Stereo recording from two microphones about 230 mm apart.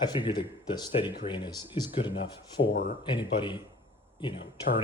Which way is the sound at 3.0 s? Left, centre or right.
Centre.